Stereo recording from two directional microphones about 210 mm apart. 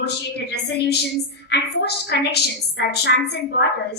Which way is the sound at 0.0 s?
50° left (ahead or behind).